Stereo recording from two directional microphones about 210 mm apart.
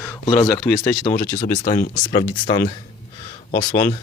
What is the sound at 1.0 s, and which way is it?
Speech, 40° left (ahead or behind).